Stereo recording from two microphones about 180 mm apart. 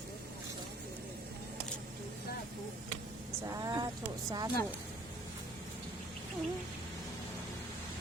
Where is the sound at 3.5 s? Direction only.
20° right (ahead or behind).